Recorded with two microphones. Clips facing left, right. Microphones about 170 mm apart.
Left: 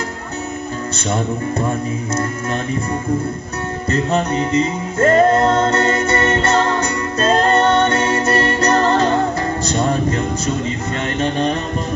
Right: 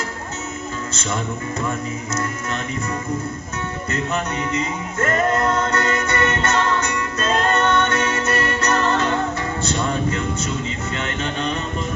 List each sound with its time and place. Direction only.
1.1 s music: 35° left (ahead or behind)
3.8 s music: 30° left (ahead or behind)